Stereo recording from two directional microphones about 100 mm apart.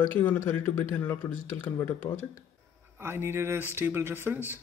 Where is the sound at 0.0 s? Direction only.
20° left (ahead or behind).